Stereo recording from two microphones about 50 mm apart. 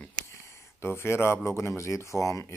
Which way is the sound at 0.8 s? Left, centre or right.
Left.